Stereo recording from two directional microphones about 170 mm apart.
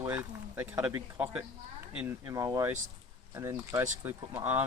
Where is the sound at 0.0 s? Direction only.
10° right (ahead or behind).